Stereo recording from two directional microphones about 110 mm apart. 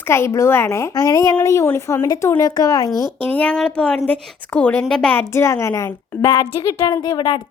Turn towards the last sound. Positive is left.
turn(degrees=45)  # may be behind; listen again after turning